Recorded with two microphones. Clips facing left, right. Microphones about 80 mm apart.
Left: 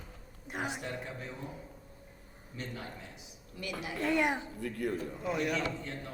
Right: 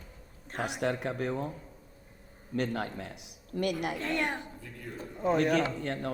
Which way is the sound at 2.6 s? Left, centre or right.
Right.